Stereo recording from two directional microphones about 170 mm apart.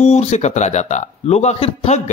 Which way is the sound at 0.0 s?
40° left (ahead or behind).